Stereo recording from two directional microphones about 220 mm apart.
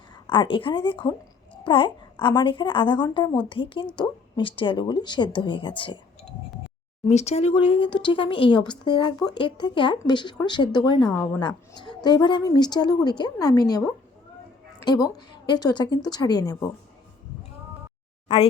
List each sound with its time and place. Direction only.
0.3 s speech: 20° left (ahead or behind)
7.1 s speech: 30° left (ahead or behind)
11.0 s a woman's voice: 5° left (ahead or behind)
11.3 s speech: 20° left (ahead or behind)
14.8 s a woman's voice: 20° left (ahead or behind)